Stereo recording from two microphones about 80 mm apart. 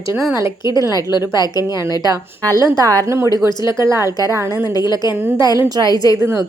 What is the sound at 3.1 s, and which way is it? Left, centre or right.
Speech, right.